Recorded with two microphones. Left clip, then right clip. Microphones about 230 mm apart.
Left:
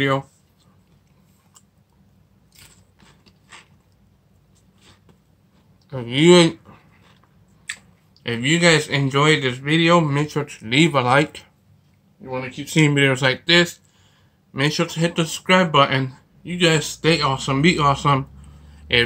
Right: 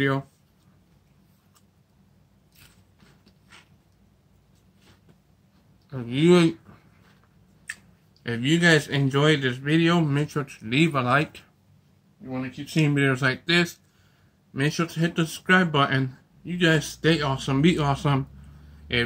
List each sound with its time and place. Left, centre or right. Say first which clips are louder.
5.9 s speech: left 6 dB; centre
8.2 s a man's voice: left 4 dB; centre
12.6 s a man's voice: left 6 dB; centre